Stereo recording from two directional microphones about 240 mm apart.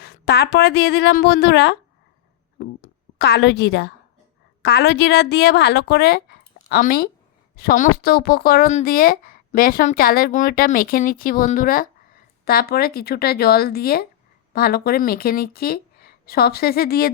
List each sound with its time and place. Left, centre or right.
0.0 s a woman's voice: left